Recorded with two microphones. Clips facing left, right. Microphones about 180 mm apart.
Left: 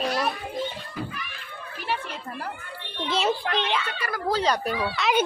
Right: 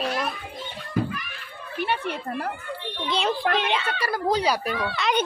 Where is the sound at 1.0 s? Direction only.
55° right (ahead or behind).